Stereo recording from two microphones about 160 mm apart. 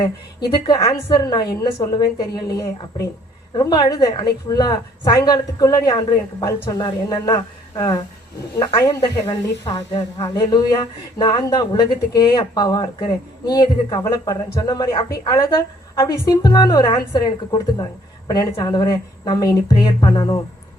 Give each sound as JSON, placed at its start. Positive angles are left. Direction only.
{"t": 0.0, "sound": "speech", "side_deg": 25}